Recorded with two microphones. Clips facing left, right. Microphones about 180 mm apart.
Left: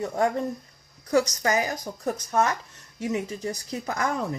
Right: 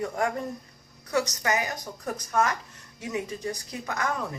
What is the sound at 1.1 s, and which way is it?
Speech, 30° left (ahead or behind).